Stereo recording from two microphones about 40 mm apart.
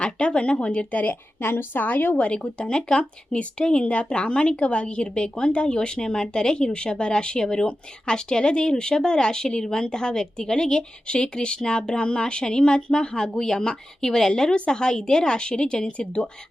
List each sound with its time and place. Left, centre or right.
0.0 s speech: left
1.4 s a woman's voice: left
2.1 s speech: left